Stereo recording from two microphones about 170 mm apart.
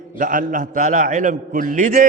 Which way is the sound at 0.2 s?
50° right (ahead or behind).